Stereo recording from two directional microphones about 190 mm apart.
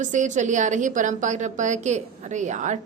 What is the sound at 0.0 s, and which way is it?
A woman's voice, 40° right (ahead or behind).